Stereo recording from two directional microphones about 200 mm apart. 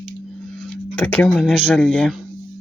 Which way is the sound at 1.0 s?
5° left (ahead or behind).